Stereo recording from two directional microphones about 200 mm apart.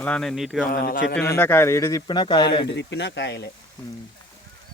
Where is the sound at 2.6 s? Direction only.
60° left (ahead or behind).